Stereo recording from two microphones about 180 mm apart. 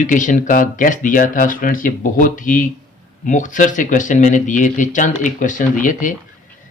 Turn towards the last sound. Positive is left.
turn(degrees=45)  # may be behind; listen again after turning